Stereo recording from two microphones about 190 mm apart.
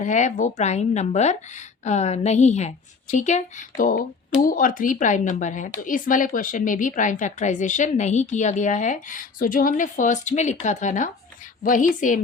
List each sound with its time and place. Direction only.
0.0 s a woman's voice: 40° left (ahead or behind)